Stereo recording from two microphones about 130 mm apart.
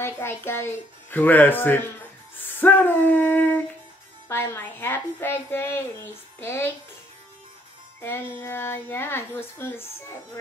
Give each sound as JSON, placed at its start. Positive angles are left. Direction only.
{"t": 0.0, "sound": "a woman's voice", "side_deg": 15}
{"t": 8.0, "sound": "a woman's voice", "side_deg": 20}